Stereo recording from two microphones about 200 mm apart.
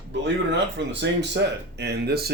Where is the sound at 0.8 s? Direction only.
60° right (ahead or behind).